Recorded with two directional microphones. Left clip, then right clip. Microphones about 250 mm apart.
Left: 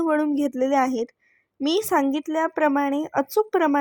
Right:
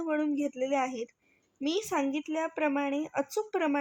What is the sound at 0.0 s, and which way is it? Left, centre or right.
A woman's voice, left.